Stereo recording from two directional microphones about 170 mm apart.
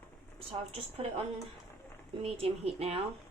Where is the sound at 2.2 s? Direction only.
35° right (ahead or behind).